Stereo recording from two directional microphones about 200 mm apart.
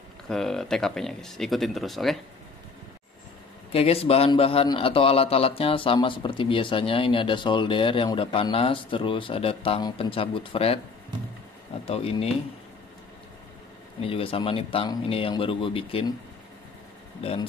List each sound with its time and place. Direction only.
0.3 s speech: centre (ahead or behind)
3.7 s a man's voice: 30° left (ahead or behind)
11.8 s a man's voice: 30° left (ahead or behind)
14.0 s a man's voice: 30° left (ahead or behind)
17.2 s a man's voice: 30° left (ahead or behind)